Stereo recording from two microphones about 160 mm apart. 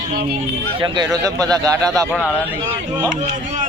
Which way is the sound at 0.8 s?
30° right (ahead or behind).